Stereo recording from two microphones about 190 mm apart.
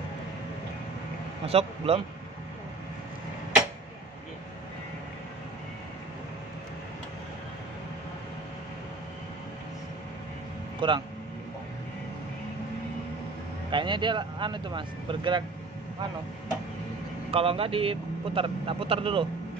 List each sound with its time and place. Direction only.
1.4 s a man's voice: 30° right (ahead or behind)
10.8 s speech: 25° right (ahead or behind)
13.7 s speech: 25° right (ahead or behind)
17.3 s speech: 30° right (ahead or behind)